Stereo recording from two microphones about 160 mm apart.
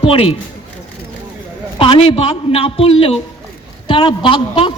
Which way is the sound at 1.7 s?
35° left (ahead or behind).